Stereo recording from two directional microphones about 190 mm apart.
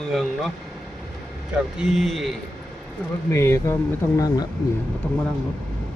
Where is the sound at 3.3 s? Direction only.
15° left (ahead or behind).